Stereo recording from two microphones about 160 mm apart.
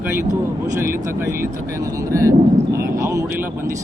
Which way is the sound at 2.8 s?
20° right (ahead or behind).